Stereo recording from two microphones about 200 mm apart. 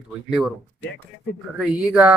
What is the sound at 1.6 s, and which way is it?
Speech, 5° right (ahead or behind).